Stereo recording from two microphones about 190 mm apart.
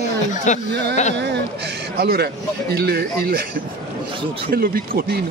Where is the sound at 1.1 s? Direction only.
65° right (ahead or behind).